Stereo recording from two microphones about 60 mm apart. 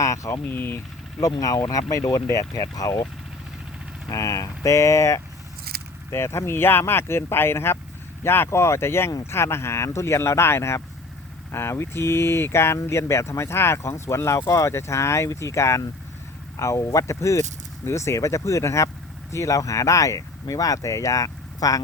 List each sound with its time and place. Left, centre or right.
0.0 s speech: left
0.5 s speech: left
1.2 s speech: left
4.1 s speech: left